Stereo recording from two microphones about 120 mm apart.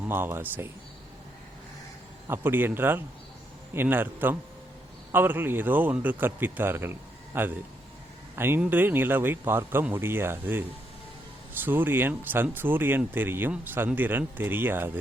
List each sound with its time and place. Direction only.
0.1 s speech: 20° right (ahead or behind)
2.3 s speech: 15° right (ahead or behind)